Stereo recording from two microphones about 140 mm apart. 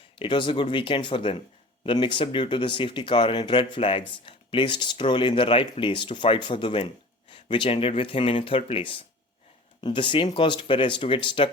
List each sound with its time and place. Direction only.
0.2 s speech: 35° left (ahead or behind)